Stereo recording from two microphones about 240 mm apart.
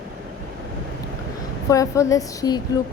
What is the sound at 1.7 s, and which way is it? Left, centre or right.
Speech, centre.